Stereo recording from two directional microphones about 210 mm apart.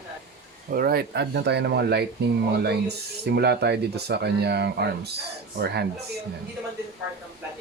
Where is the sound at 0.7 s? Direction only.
45° right (ahead or behind).